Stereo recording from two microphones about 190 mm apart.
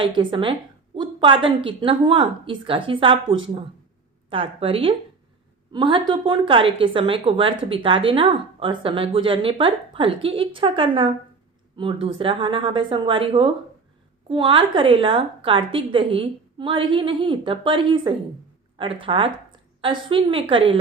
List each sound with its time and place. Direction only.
0.2 s a woman's voice: 25° right (ahead or behind)